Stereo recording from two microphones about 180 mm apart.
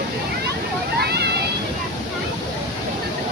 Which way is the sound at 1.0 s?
65° right (ahead or behind).